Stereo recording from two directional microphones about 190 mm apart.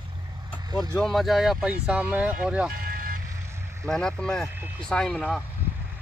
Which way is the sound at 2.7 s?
50° right (ahead or behind).